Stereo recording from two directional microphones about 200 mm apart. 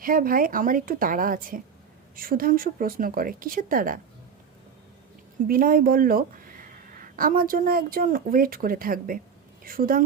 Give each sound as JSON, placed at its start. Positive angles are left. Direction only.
{"t": 0.0, "sound": "speech", "side_deg": -45}
{"t": 5.5, "sound": "speech", "side_deg": -45}